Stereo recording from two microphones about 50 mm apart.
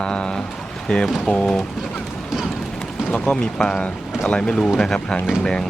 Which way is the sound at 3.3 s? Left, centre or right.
Centre.